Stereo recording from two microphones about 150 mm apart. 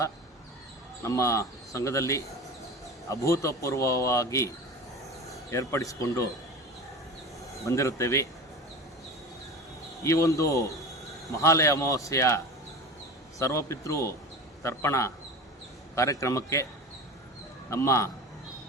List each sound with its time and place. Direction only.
1.0 s speech: 20° left (ahead or behind)
7.6 s speech: 20° left (ahead or behind)
10.0 s speech: 20° left (ahead or behind)
13.4 s speech: 20° left (ahead or behind)
17.7 s speech: 20° left (ahead or behind)